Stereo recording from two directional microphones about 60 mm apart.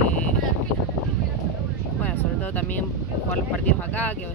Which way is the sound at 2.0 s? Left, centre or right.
Left.